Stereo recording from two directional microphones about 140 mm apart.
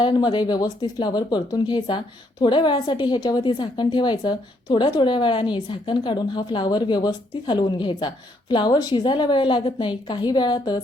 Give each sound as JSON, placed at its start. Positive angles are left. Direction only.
{"t": 0.0, "sound": "speech", "side_deg": 35}